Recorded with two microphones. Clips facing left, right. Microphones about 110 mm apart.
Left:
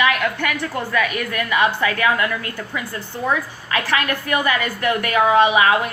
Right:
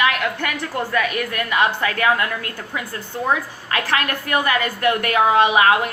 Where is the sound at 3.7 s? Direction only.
45° right (ahead or behind).